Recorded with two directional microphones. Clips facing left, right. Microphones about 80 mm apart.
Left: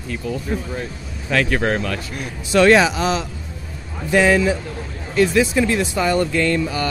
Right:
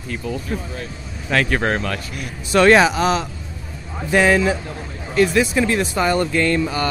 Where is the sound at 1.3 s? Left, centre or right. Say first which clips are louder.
Even; right.